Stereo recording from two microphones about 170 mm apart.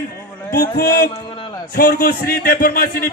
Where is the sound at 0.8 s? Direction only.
60° left (ahead or behind).